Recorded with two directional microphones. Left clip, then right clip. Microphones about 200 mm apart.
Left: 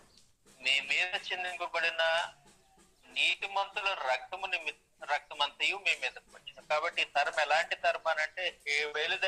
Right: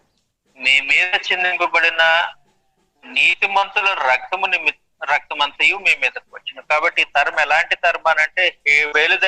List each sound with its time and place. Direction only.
0.6 s speech: 40° right (ahead or behind)